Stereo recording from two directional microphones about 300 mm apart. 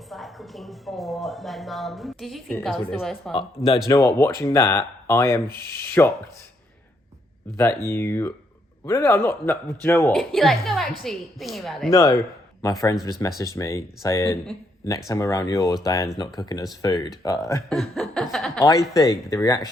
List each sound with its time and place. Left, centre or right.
0.1 s speech: centre
3.3 s speech: centre
7.5 s speech: centre